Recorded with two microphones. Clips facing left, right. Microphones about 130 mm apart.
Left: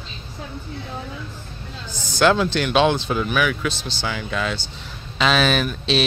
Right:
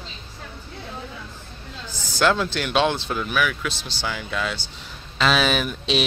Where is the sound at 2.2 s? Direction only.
Centre (ahead or behind).